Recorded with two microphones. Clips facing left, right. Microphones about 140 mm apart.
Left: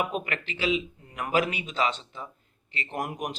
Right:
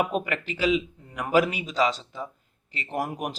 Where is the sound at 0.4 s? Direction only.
40° right (ahead or behind).